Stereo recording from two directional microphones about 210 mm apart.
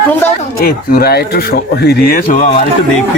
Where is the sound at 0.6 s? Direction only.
45° left (ahead or behind).